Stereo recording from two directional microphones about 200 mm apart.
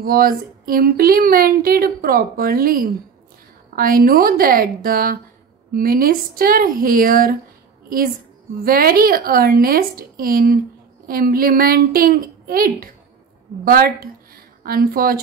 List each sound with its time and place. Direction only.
0.0 s speech: 45° right (ahead or behind)
8.6 s a woman's voice: 45° right (ahead or behind)